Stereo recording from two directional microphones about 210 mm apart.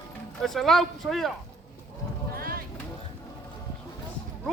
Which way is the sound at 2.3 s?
45° right (ahead or behind).